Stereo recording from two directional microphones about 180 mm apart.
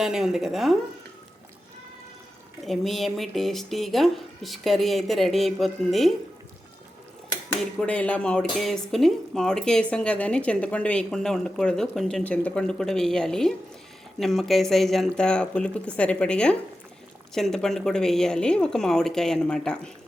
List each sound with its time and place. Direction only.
0.0 s speech: centre (ahead or behind)
2.6 s speech: centre (ahead or behind)
7.8 s speech: 5° left (ahead or behind)